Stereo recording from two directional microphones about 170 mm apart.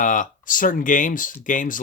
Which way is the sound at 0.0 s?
50° left (ahead or behind).